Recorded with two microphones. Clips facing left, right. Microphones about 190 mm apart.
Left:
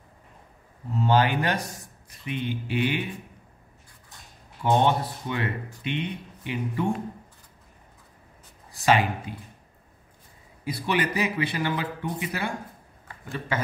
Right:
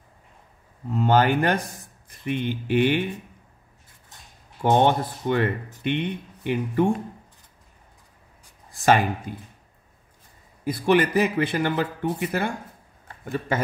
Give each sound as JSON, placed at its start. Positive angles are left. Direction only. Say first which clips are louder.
{"t": 0.9, "sound": "speech", "louder": "right 3 dB", "side_deg": -50}
{"t": 4.6, "sound": "speech", "louder": "right 3 dB", "side_deg": -55}
{"t": 8.8, "sound": "speech", "louder": "right 2 dB", "side_deg": -45}
{"t": 10.6, "sound": "speech", "louder": "right 7 dB", "side_deg": -45}